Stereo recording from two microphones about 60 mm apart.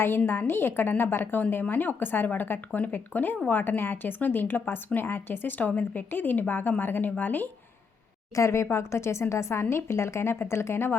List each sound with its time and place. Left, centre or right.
0.3 s speech: left
8.4 s speech: left